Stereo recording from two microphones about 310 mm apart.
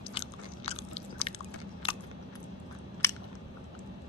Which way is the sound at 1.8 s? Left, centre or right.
Centre.